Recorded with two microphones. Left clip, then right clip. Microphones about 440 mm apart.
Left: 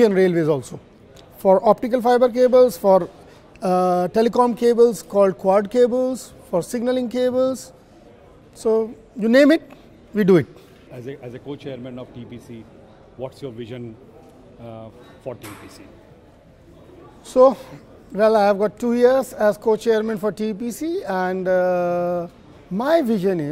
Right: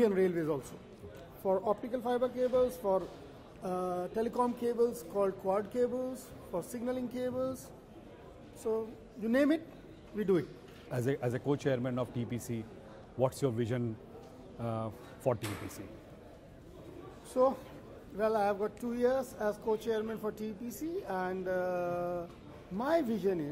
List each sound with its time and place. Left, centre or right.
0.0 s a man's voice: left
1.4 s speech: left
8.6 s speech: left
10.9 s speech: right
17.3 s a man's voice: left